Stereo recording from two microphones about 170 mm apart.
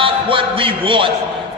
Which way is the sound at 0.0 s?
30° right (ahead or behind).